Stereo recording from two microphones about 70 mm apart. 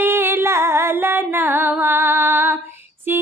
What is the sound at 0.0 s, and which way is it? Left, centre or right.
Music, right.